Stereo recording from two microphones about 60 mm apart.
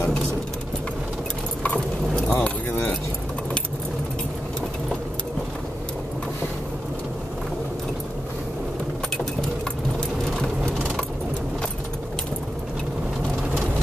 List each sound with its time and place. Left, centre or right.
1.6 s keys jangling: centre